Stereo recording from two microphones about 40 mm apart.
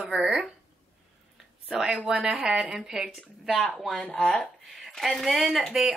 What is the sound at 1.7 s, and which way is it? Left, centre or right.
A woman's voice, centre.